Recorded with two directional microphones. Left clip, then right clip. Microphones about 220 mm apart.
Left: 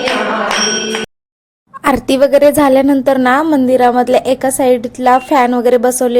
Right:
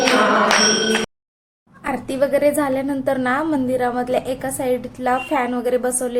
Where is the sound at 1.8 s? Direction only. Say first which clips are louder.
Left 10 dB; 45° left (ahead or behind).